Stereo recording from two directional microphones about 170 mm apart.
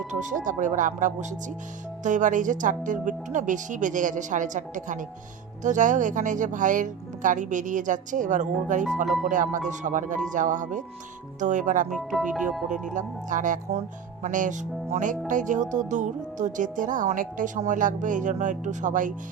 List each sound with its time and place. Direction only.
0.1 s speech: 45° right (ahead or behind)
9.0 s speech: centre (ahead or behind)
9.3 s speech: 50° right (ahead or behind)
12.3 s speech: 5° right (ahead or behind)
12.6 s speech: 50° right (ahead or behind)